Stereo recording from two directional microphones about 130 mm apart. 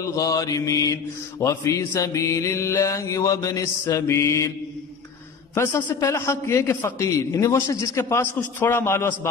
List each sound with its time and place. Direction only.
0.0 s a man's voice: 25° left (ahead or behind)
5.9 s a man's voice: 25° left (ahead or behind)